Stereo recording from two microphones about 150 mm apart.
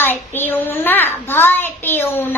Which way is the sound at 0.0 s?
15° left (ahead or behind).